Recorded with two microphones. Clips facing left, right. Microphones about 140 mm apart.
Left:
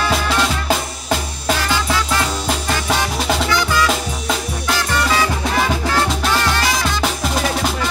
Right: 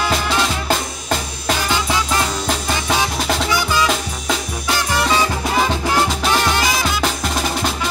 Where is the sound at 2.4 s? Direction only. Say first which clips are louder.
Left 1 dB; centre (ahead or behind).